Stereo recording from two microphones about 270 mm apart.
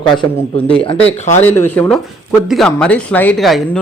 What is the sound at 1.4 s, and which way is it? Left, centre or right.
A man's voice, centre.